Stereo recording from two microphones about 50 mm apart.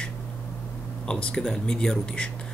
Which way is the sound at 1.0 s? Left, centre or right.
Centre.